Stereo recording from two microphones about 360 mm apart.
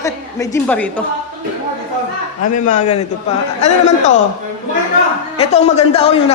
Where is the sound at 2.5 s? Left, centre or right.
Centre.